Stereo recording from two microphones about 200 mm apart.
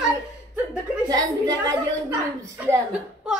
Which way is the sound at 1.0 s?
20° right (ahead or behind).